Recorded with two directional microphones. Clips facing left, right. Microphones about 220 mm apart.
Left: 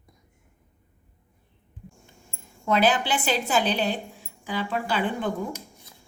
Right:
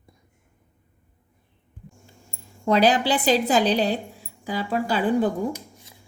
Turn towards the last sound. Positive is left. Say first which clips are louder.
# right 5 dB
turn(degrees=-40)  # may be behind; listen again after turning